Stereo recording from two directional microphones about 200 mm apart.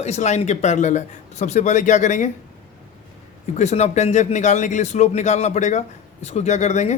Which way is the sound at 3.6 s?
35° left (ahead or behind).